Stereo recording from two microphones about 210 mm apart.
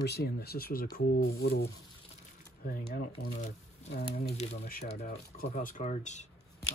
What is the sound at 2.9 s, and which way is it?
Speech, 35° left (ahead or behind).